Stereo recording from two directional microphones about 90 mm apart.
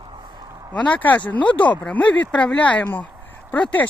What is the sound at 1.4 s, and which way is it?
Speech, 60° left (ahead or behind).